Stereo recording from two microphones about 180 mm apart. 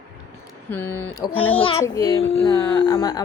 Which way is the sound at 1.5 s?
30° left (ahead or behind).